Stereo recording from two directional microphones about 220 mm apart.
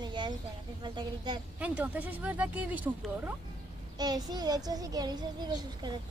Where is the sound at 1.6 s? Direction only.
5° right (ahead or behind).